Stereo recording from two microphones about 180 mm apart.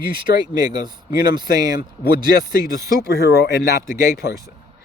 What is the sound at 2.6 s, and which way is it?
Speech, 60° left (ahead or behind).